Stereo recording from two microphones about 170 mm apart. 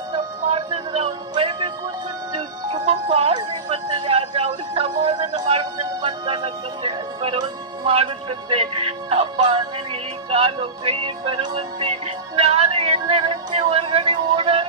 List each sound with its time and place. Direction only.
0.5 s music: 30° right (ahead or behind)